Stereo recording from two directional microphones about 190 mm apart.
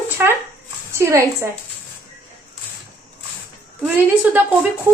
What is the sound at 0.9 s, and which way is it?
Speech, 15° right (ahead or behind).